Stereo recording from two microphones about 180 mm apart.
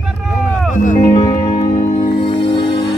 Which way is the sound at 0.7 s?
45° left (ahead or behind).